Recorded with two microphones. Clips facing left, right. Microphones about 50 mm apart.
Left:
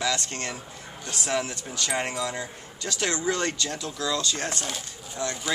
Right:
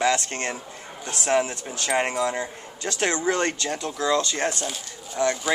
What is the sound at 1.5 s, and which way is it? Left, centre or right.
Speech, centre.